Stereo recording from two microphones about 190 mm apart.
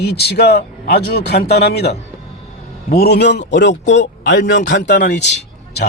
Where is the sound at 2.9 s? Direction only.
60° left (ahead or behind).